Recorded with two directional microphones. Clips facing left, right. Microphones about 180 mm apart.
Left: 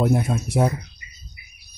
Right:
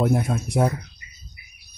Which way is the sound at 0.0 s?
Centre (ahead or behind).